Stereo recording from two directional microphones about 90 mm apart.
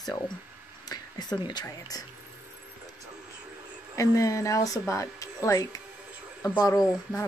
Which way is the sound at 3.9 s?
40° left (ahead or behind).